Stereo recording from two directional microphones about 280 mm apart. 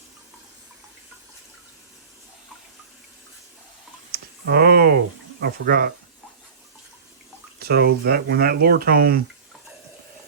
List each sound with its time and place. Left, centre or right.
4.1 s a sound: right
5.4 s speech: right
7.6 s speech: right